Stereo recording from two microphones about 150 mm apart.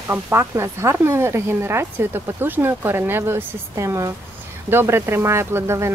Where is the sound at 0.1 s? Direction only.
15° right (ahead or behind).